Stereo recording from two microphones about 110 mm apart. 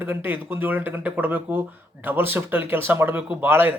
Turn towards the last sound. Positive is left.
turn(degrees=-20)  # may be behind; listen again after turning